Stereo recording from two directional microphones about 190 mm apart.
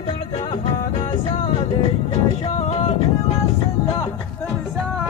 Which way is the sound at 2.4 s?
30° left (ahead or behind).